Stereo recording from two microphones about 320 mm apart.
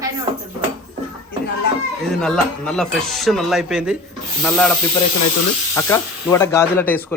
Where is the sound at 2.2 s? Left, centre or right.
Centre.